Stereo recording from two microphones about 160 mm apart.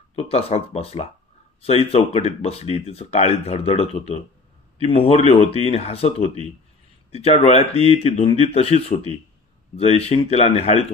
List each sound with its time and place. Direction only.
0.1 s speech: 40° left (ahead or behind)